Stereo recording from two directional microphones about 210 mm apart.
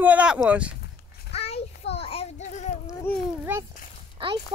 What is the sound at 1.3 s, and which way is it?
Child singing, 30° left (ahead or behind).